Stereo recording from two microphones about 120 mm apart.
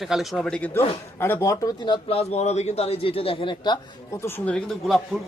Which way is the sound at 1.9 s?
55° left (ahead or behind).